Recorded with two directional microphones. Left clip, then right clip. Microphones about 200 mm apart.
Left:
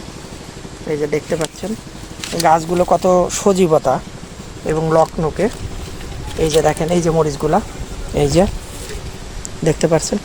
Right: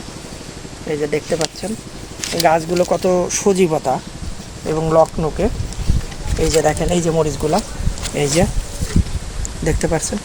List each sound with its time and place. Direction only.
0.9 s speech: 10° left (ahead or behind)
2.3 s speech: 20° left (ahead or behind); by 4.0 s 40° left (ahead or behind)
4.7 s speech: 20° left (ahead or behind)
8.1 s speech: 30° left (ahead or behind)
9.6 s speech: 50° left (ahead or behind)